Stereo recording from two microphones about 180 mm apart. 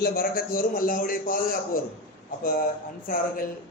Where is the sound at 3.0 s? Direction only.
55° left (ahead or behind).